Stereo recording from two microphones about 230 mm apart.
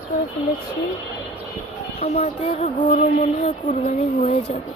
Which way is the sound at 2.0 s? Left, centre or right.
Left.